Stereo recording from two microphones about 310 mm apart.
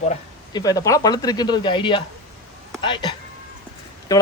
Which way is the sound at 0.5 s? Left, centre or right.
Centre.